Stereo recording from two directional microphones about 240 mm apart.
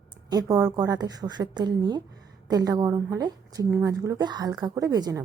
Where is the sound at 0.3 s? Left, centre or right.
Centre.